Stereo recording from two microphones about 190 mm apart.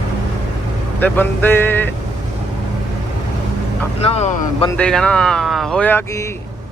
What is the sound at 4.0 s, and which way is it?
Speech, 35° left (ahead or behind).